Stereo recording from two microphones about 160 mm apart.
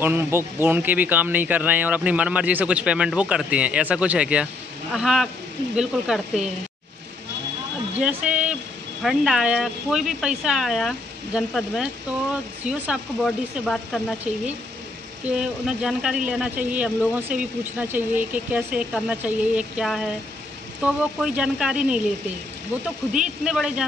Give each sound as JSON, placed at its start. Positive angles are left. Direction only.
{"t": 0.0, "sound": "speech", "side_deg": -15}
{"t": 7.9, "sound": "speech", "side_deg": -10}
{"t": 15.2, "sound": "speech", "side_deg": -5}
{"t": 23.1, "sound": "speech", "side_deg": -5}